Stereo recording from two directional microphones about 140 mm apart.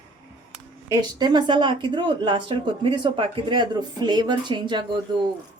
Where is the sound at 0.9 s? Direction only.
30° right (ahead or behind).